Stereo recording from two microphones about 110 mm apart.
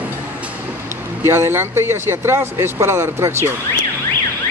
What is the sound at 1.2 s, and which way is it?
A man's voice, 25° right (ahead or behind).